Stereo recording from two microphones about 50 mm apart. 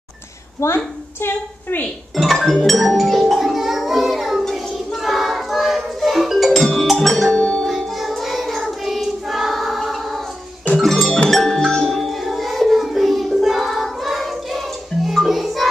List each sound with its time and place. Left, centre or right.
0.6 s a woman's voice: left
1.2 s a woman's voice: left
2.5 s music: centre
6.5 s music: centre
7.3 s music: centre
8.0 s choir: centre
10.8 s music: centre